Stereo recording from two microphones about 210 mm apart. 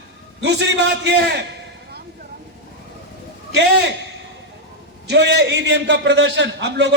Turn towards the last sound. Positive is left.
turn(degrees=-55)  # may be behind; listen again after turning